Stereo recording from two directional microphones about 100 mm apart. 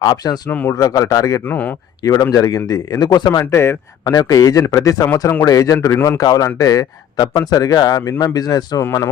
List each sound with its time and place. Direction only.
0.0 s speech: 40° left (ahead or behind)
1.5 s speech: 15° left (ahead or behind)
2.0 s speech: 35° left (ahead or behind)
3.4 s a man's voice: 25° left (ahead or behind)
4.1 s speech: 40° left (ahead or behind)